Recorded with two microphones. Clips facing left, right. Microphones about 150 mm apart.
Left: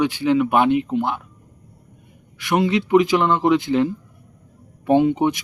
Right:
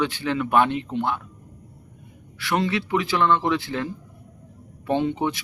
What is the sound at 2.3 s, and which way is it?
Speech, 15° left (ahead or behind).